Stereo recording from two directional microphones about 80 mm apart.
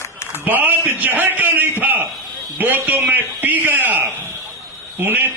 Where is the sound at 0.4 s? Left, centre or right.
Right.